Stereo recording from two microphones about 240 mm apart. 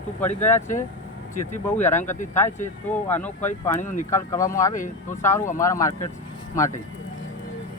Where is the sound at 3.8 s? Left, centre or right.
Left.